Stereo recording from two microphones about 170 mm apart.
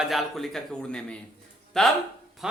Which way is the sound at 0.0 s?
Centre (ahead or behind).